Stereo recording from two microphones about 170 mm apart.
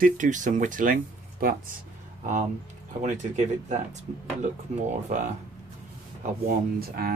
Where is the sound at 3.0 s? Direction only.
45° right (ahead or behind).